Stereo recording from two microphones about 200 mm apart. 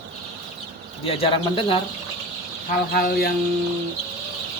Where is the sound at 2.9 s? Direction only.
50° left (ahead or behind).